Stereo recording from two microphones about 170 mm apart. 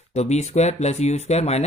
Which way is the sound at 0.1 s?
40° left (ahead or behind).